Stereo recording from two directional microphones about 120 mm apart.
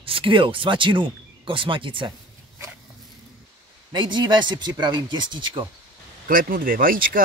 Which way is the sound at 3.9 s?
40° right (ahead or behind).